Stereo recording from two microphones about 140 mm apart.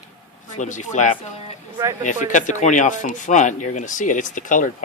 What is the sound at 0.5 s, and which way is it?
Speech, 60° left (ahead or behind).